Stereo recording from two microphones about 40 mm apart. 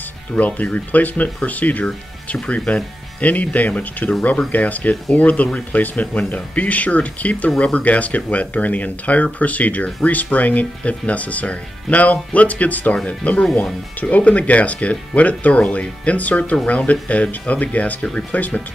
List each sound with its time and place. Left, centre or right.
0.4 s speech: left
2.4 s speech: left